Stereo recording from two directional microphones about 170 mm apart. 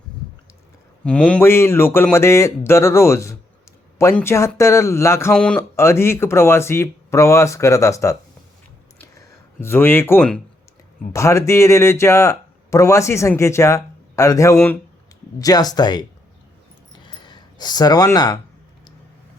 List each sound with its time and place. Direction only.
1.0 s speech: 5° left (ahead or behind)
5.3 s speech: 5° left (ahead or behind)
9.0 s a sound: 15° left (ahead or behind)
11.1 s speech: 15° left (ahead or behind)
17.2 s speech: 25° left (ahead or behind)